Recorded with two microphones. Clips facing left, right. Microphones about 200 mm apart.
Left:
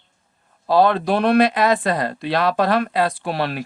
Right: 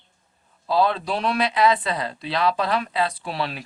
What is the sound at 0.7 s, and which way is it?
Speech, 60° left (ahead or behind).